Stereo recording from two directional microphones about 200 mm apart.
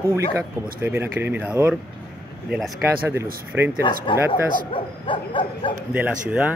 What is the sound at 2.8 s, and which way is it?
Speech, 15° right (ahead or behind).